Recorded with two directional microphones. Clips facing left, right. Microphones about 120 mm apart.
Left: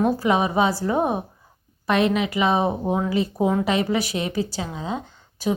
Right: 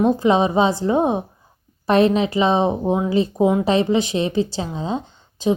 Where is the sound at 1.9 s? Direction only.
35° right (ahead or behind).